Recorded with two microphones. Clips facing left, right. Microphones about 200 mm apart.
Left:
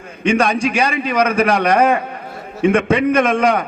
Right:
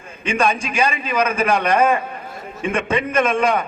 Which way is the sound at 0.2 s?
70° left (ahead or behind).